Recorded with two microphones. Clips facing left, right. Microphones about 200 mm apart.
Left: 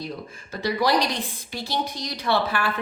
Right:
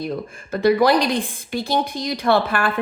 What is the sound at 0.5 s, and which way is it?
A woman's voice, 55° right (ahead or behind).